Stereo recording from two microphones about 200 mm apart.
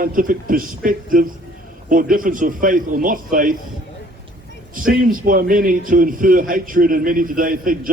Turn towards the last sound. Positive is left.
turn(degrees=-45)  # may be behind; listen again after turning